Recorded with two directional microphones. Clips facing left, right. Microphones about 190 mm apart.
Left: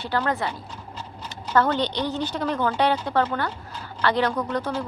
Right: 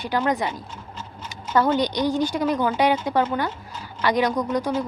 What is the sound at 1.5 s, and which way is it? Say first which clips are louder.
A woman's voice: right 2 dB; 10° right (ahead or behind).